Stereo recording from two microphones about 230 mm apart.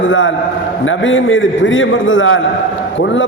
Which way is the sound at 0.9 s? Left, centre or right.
Left.